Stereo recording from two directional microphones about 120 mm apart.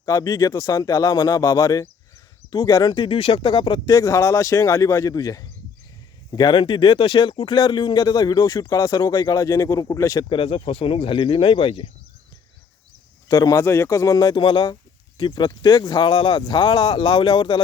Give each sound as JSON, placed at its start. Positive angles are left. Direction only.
{"t": 0.0, "sound": "speech", "side_deg": 30}
{"t": 10.2, "sound": "speech", "side_deg": 45}
{"t": 13.2, "sound": "speech", "side_deg": 30}